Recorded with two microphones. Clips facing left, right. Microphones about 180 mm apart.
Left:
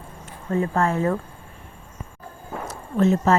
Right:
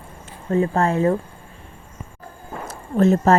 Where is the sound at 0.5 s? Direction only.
35° right (ahead or behind).